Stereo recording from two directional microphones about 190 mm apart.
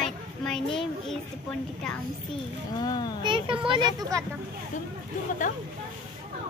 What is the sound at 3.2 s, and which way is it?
Speech, 25° right (ahead or behind).